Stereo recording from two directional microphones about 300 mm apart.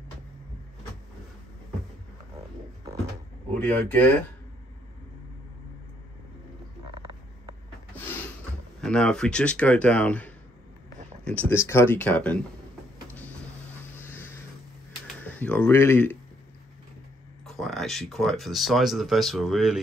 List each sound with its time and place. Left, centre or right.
3.5 s speech: centre
6.9 s a sound: centre
8.8 s speech: centre
13.9 s vehicle: centre
15.2 s speech: centre
17.5 s speech: centre